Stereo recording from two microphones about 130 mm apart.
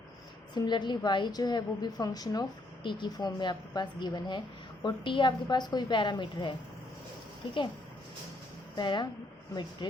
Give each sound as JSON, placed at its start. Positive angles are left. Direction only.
{"t": 0.5, "sound": "a woman's voice", "side_deg": 35}
{"t": 8.7, "sound": "speech", "side_deg": 35}